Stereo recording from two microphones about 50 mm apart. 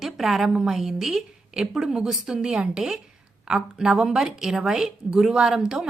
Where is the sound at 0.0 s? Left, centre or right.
Centre.